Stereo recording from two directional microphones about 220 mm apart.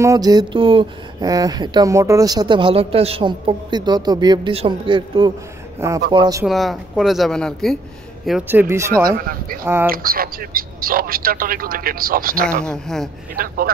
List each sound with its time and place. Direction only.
0.0 s speech: 15° right (ahead or behind)
6.4 s a man's voice: centre (ahead or behind)
9.0 s a man's voice: 40° right (ahead or behind)
12.6 s speech: centre (ahead or behind)